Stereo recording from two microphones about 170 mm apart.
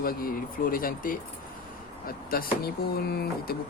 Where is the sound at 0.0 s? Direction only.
60° left (ahead or behind).